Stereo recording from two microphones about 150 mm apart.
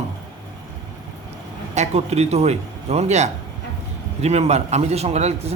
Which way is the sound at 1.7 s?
45° right (ahead or behind).